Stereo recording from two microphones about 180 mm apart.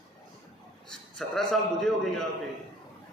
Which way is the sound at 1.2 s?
Centre (ahead or behind).